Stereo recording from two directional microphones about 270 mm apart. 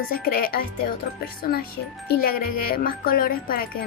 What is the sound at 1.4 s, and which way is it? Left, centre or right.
Speech, left.